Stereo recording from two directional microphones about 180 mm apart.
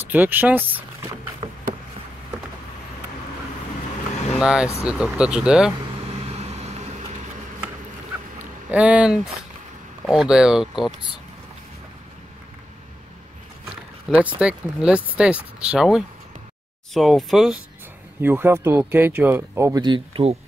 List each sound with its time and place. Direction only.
0.0 s speech: 10° right (ahead or behind)
1.4 s a sound: 30° right (ahead or behind)
4.4 s speech: 5° right (ahead or behind)
6.1 s vehicle: 35° right (ahead or behind)
8.6 s speech: 5° right (ahead or behind)
14.1 s speech: 5° right (ahead or behind)
18.2 s speech: 10° right (ahead or behind); by 20.3 s 30° right (ahead or behind)